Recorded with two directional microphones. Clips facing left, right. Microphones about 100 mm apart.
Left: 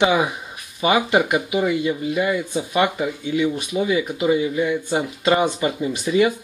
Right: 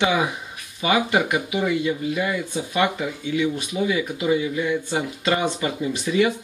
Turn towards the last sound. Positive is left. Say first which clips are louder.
# left 2 dB
turn(degrees=20)  # may be behind; listen again after turning